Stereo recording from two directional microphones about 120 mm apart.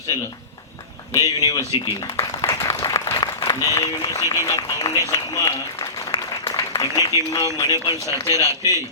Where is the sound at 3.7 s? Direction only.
30° left (ahead or behind).